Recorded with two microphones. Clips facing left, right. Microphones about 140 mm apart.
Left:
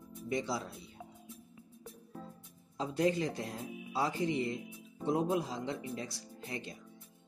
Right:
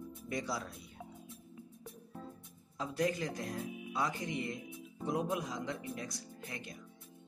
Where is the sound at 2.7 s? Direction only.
25° left (ahead or behind).